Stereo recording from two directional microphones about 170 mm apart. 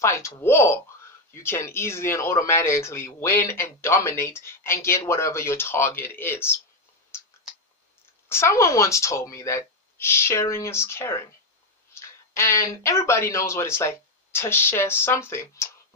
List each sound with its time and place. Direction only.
0.0 s speech: 15° left (ahead or behind)
8.3 s speech: 15° left (ahead or behind)